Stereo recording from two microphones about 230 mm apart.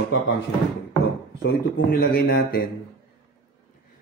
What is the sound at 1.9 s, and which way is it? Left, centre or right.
Speech, left.